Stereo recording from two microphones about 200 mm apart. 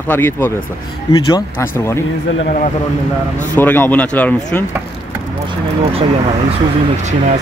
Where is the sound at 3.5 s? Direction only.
10° left (ahead or behind).